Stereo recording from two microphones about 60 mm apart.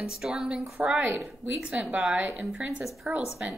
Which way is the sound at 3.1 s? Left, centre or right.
Right.